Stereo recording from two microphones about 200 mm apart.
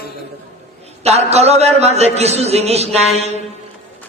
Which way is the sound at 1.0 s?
30° right (ahead or behind).